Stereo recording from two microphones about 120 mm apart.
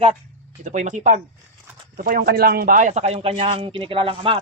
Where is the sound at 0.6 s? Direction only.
90° right.